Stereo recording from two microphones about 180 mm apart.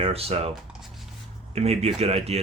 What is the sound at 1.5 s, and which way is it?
Speech, 35° right (ahead or behind).